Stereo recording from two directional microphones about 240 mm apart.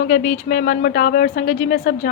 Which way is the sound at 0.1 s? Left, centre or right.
Left.